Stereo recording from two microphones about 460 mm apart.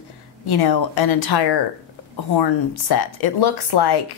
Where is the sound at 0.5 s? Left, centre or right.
Left.